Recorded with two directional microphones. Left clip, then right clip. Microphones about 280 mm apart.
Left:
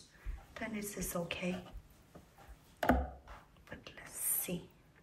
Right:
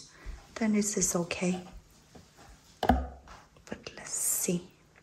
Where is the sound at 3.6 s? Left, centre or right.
Centre.